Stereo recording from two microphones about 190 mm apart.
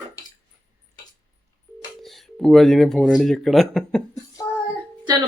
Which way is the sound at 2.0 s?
Centre (ahead or behind).